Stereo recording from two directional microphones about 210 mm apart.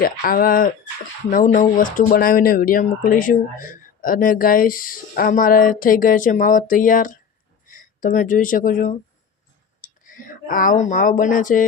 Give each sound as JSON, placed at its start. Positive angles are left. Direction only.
{"t": 0.0, "sound": "speech", "side_deg": 45}